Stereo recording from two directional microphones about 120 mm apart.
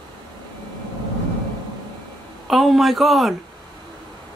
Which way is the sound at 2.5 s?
Centre (ahead or behind).